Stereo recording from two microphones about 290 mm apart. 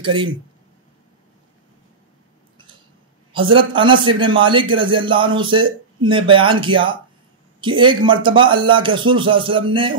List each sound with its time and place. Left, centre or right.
0.0 s a man's voice: centre
3.3 s a man's voice: centre